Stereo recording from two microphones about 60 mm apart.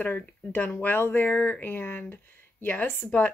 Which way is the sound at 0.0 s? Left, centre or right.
Left.